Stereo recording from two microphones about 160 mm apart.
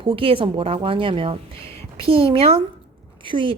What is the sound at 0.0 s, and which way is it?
A woman's voice, 35° right (ahead or behind).